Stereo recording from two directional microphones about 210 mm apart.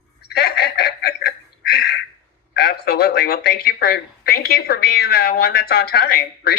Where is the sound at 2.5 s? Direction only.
50° left (ahead or behind).